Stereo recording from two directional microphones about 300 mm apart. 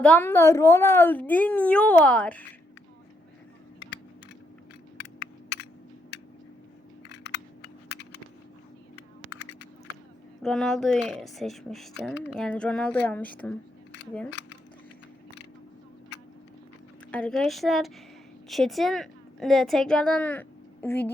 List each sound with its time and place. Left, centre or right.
0.0 s speech: centre
7.1 s a sound: left
7.9 s computer keyboard: left
10.4 s speech: centre
17.1 s a woman's voice: centre